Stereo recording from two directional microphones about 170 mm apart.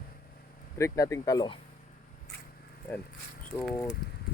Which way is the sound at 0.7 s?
15° left (ahead or behind).